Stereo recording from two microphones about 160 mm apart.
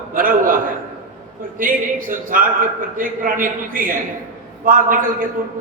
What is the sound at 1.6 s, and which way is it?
A man's voice, 60° right (ahead or behind).